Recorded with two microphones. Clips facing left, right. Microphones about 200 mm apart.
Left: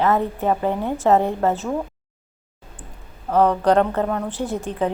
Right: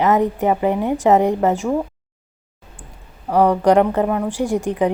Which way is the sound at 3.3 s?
15° right (ahead or behind).